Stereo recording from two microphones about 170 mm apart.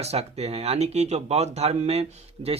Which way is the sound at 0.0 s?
40° right (ahead or behind).